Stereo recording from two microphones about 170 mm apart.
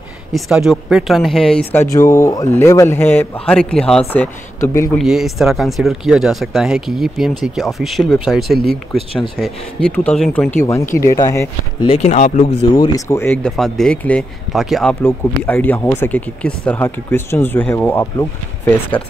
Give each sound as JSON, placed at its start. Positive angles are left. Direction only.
{"t": 0.3, "sound": "speech", "side_deg": 0}
{"t": 4.9, "sound": "speech", "side_deg": 0}
{"t": 11.9, "sound": "speech", "side_deg": 40}
{"t": 13.1, "sound": "speech", "side_deg": 10}